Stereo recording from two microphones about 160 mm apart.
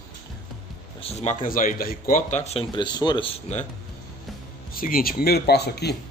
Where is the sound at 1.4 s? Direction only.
60° left (ahead or behind); by 3.7 s 40° left (ahead or behind).